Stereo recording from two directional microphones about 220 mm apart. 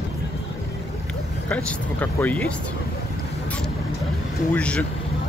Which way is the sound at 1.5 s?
5° left (ahead or behind).